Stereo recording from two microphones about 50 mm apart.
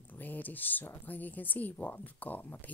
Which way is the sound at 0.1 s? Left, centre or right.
Left.